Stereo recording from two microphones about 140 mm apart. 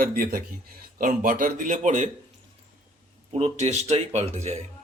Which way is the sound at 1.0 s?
75° right (ahead or behind).